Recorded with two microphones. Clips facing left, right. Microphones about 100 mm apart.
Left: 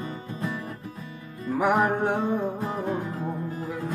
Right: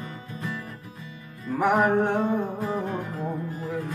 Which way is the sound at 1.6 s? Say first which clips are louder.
Right 2 dB; 5° left (ahead or behind).